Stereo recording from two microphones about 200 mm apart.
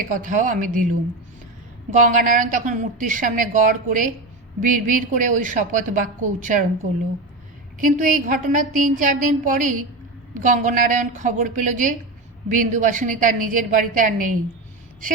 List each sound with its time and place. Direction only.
0.0 s a woman's voice: 40° right (ahead or behind)
1.9 s a woman's voice: 40° right (ahead or behind)
7.8 s a woman's voice: 40° right (ahead or behind)